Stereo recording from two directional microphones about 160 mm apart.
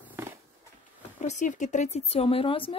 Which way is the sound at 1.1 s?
50° left (ahead or behind).